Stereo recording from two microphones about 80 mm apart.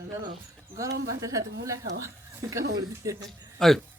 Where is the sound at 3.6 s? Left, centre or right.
Centre.